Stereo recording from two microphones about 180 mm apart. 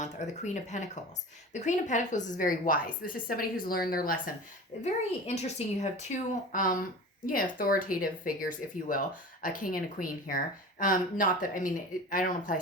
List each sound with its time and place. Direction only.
0.0 s speech: 40° left (ahead or behind)
4.8 s speech: 40° left (ahead or behind)